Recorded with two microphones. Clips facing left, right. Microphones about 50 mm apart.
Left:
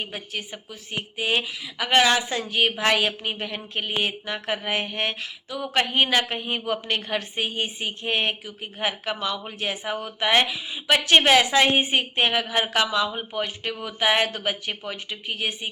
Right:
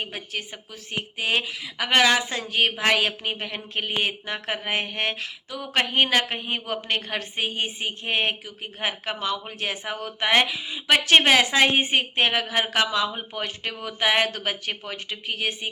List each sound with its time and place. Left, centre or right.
0.0 s a woman's voice: right
13.3 s speech: left
13.8 s a woman's voice: right